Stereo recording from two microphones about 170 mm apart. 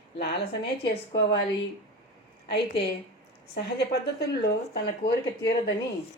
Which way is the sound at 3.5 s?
75° left (ahead or behind).